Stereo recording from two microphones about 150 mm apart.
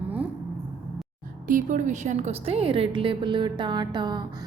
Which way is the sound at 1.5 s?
60° right (ahead or behind).